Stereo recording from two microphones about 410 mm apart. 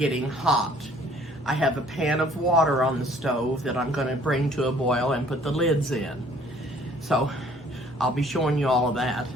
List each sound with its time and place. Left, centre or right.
0.0 s speech: centre